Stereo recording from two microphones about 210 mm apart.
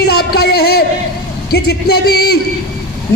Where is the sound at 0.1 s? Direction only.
50° left (ahead or behind).